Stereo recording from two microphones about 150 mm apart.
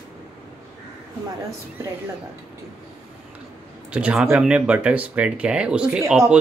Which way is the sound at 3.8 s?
5° right (ahead or behind).